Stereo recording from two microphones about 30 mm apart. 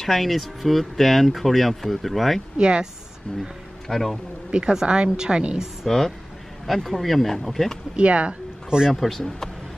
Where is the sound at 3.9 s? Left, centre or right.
Centre.